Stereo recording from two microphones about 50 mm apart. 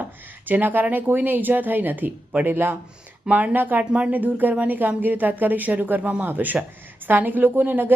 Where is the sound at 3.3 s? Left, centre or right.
Right.